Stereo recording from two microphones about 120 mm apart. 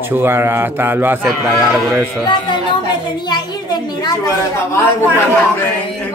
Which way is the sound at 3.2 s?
35° left (ahead or behind).